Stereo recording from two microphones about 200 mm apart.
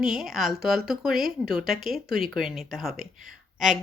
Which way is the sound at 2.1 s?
50° right (ahead or behind).